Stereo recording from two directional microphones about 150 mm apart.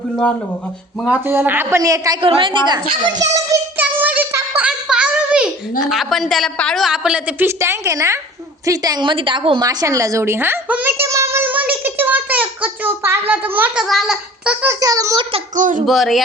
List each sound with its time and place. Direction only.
1.1 s a woman's voice: 15° right (ahead or behind)
2.2 s a woman's voice: 35° right (ahead or behind)
3.3 s child singing: 15° right (ahead or behind)
5.8 s a woman's voice: centre (ahead or behind); by 9.6 s 35° right (ahead or behind)
9.6 s a sound: 20° right (ahead or behind)
13.8 s a child's voice: centre (ahead or behind)
14.7 s a child's voice: 25° right (ahead or behind)
15.5 s speech: 60° right (ahead or behind)
15.9 s a woman's voice: centre (ahead or behind)